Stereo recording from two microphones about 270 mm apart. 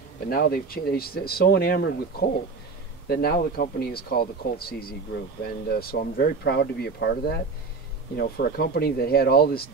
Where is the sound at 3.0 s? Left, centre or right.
Left.